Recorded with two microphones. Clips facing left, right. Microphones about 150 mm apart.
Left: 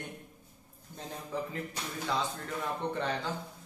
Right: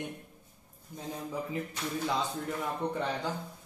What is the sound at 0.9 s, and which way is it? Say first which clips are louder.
Speech: right 1 dB; 10° right (ahead or behind).